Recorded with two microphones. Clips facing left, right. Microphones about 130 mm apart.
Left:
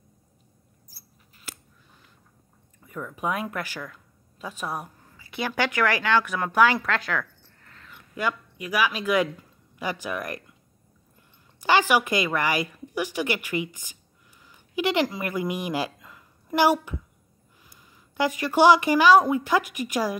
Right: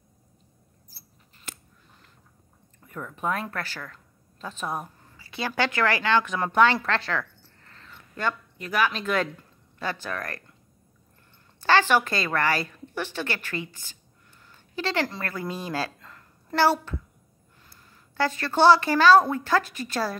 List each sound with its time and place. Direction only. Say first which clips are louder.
0.9 s mouse: right 1 dB; 10° left (ahead or behind)
2.8 s a woman's voice: left 1 dB; centre (ahead or behind)
7.1 s a sound: even; 5° left (ahead or behind)
11.6 s a woman's voice: even; 15° left (ahead or behind)
14.5 s a sound: left 4 dB; 15° left (ahead or behind)
15.1 s a woman's voice: left 4 dB; 15° left (ahead or behind)